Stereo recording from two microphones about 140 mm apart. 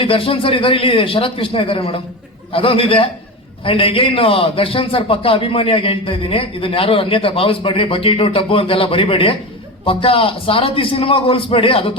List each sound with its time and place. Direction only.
0.0 s a man's voice: 40° left (ahead or behind)